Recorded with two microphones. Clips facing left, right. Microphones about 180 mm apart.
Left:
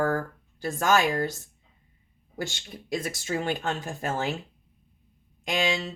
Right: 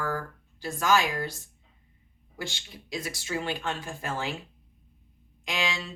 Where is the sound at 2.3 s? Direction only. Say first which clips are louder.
Left 4 dB; 45° left (ahead or behind).